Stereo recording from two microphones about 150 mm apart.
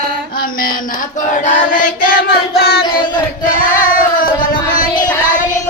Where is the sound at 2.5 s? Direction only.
90° left.